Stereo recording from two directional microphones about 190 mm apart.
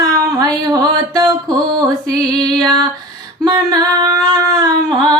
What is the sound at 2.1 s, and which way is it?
Female singing, 20° right (ahead or behind).